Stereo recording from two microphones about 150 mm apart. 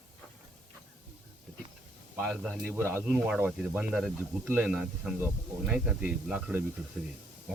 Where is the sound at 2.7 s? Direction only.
15° right (ahead or behind).